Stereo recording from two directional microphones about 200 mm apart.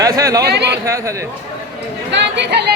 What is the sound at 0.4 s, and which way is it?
Speech, 55° right (ahead or behind).